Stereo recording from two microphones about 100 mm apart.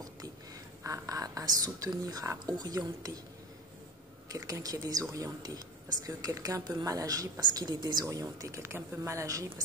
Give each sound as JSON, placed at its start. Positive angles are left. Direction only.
{"t": 0.8, "sound": "a woman's voice", "side_deg": -35}
{"t": 4.3, "sound": "a woman's voice", "side_deg": -35}